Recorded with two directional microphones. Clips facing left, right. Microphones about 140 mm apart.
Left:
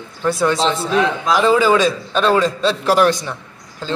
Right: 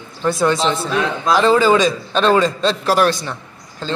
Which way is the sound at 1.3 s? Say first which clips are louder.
Right 1 dB; 10° left (ahead or behind).